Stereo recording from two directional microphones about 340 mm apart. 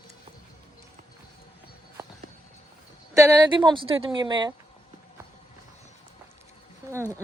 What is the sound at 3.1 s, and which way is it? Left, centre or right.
A woman's voice, centre.